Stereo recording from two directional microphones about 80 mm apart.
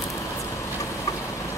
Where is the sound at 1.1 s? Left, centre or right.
Left.